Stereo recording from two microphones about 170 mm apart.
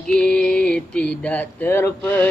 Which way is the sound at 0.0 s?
5° left (ahead or behind).